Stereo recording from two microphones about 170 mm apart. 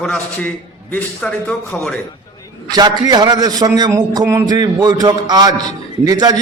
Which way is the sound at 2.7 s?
25° right (ahead or behind).